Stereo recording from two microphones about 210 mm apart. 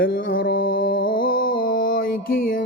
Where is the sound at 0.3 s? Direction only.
45° left (ahead or behind).